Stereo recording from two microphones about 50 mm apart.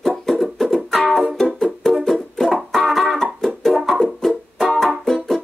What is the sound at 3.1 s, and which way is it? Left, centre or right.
Music, centre.